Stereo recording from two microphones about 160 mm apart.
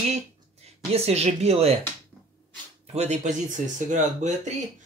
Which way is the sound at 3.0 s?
50° right (ahead or behind).